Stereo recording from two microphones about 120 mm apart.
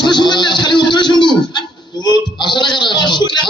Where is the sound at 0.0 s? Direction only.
40° left (ahead or behind).